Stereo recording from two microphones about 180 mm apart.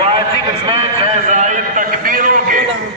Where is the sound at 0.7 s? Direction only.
30° right (ahead or behind); by 2.6 s 50° right (ahead or behind).